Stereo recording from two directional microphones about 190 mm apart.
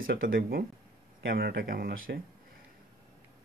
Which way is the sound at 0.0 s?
50° right (ahead or behind).